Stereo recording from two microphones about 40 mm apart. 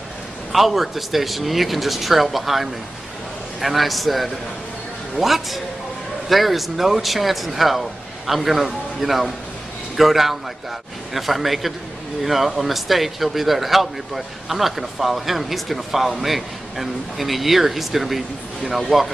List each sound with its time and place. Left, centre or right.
0.5 s speech: centre